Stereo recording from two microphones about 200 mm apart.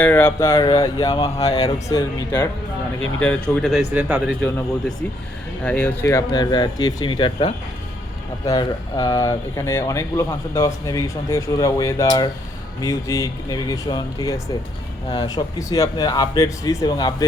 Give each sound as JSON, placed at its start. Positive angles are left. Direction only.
{"t": 0.0, "sound": "speech", "side_deg": 10}
{"t": 3.2, "sound": "speech", "side_deg": 5}
{"t": 3.9, "sound": "speech", "side_deg": -10}
{"t": 4.4, "sound": "speech", "side_deg": 5}